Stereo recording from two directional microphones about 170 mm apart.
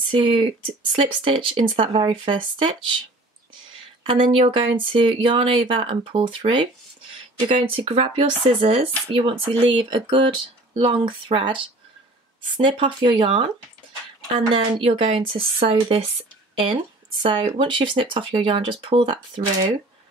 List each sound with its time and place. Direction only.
0.1 s speech: 30° right (ahead or behind)
4.0 s speech: 30° right (ahead or behind)
17.2 s speech: 30° right (ahead or behind)